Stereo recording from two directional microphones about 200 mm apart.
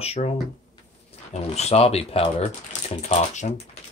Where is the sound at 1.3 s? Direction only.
30° left (ahead or behind).